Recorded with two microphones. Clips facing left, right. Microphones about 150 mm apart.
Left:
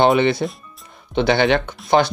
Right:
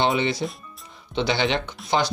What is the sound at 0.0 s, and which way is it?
Speech, 55° left (ahead or behind).